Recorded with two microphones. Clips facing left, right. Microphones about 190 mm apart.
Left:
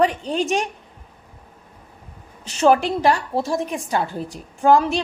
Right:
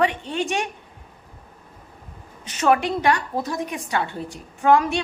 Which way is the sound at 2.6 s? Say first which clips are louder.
Left 3 dB; 35° left (ahead or behind).